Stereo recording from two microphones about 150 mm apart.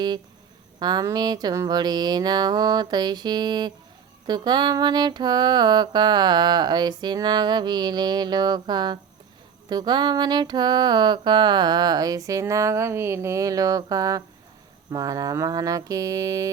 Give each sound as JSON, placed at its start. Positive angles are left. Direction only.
{"t": 0.8, "sound": "mantra", "side_deg": -25}